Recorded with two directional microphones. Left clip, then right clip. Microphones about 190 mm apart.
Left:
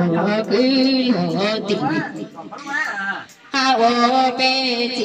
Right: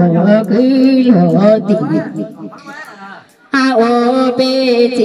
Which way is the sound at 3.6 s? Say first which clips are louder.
Right 4 dB; 60° right (ahead or behind).